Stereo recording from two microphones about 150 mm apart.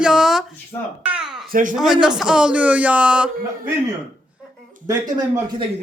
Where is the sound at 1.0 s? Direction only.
5° right (ahead or behind).